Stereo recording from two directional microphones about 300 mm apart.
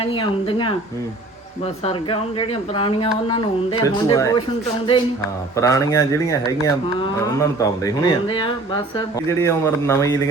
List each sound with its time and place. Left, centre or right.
0.0 s speech: centre
5.5 s speech: centre